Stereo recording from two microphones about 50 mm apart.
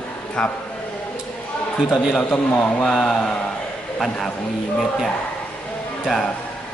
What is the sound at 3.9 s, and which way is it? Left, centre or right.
Speech, centre.